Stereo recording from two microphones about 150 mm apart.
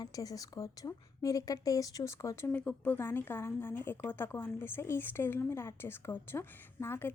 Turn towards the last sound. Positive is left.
turn(degrees=15)  # may be behind; listen again after turning